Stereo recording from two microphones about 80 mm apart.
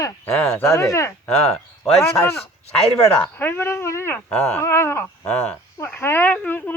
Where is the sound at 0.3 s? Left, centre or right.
Centre.